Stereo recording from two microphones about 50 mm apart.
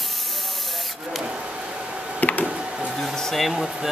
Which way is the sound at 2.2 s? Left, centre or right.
Left.